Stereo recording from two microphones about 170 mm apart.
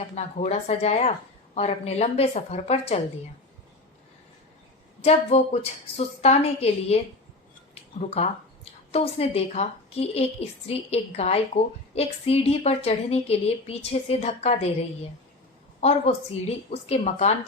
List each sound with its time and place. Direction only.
0.3 s a woman's voice: 40° left (ahead or behind)
5.3 s a woman's voice: 40° left (ahead or behind)
15.8 s a woman's voice: 40° left (ahead or behind)